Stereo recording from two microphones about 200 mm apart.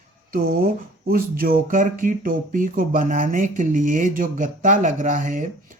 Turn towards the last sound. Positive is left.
turn(degrees=-40)  # may be behind; listen again after turning